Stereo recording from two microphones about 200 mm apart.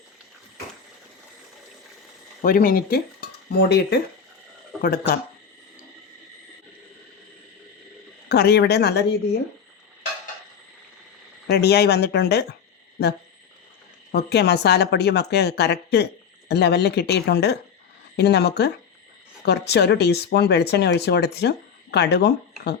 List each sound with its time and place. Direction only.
2.4 s speech: 45° left (ahead or behind)
8.3 s speech: 55° left (ahead or behind)
11.4 s speech: 55° left (ahead or behind)
14.1 s speech: 55° left (ahead or behind)